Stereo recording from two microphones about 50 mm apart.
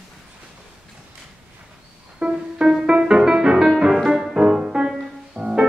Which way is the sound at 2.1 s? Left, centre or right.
Right.